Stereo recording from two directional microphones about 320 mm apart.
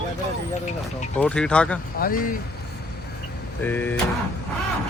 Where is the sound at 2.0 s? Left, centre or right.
Left.